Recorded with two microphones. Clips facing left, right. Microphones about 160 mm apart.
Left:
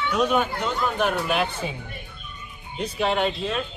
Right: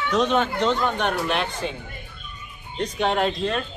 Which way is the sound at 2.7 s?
5° left (ahead or behind).